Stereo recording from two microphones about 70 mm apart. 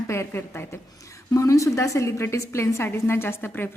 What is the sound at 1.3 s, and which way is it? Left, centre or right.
A woman's voice, left.